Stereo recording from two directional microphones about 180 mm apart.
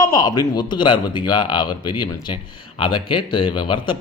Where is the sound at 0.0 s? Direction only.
20° left (ahead or behind).